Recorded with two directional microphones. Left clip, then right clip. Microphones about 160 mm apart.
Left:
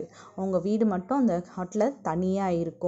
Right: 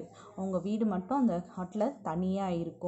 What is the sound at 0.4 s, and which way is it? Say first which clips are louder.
Speech: left 7 dB; 45° left (ahead or behind).